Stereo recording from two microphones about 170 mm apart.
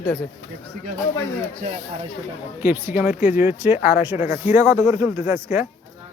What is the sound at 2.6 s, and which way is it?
Speech, 10° right (ahead or behind).